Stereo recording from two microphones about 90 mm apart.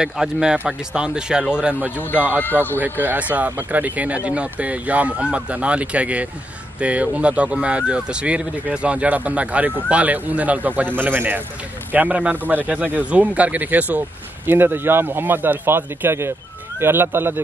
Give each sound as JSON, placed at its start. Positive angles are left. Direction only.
{"t": 0.0, "sound": "speech", "side_deg": -5}